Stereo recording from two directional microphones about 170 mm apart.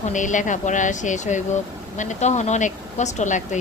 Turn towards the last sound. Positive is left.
turn(degrees=45)  # may be behind; listen again after turning